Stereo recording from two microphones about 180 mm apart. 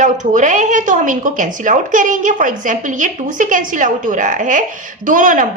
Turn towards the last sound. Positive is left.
turn(degrees=-45)  # may be behind; listen again after turning